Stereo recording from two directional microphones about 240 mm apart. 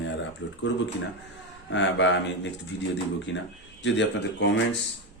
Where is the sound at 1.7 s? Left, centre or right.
Left.